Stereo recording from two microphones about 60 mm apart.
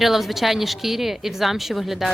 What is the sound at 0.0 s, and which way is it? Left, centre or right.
Speech, centre.